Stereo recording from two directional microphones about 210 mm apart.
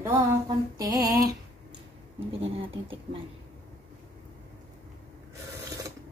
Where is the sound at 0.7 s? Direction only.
15° right (ahead or behind).